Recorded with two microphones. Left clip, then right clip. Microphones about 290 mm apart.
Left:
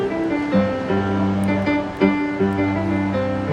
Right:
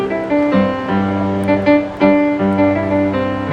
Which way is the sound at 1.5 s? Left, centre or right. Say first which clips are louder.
Right 12 dB; right.